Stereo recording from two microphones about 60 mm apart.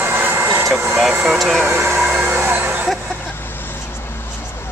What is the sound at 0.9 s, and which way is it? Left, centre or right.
Speech, centre.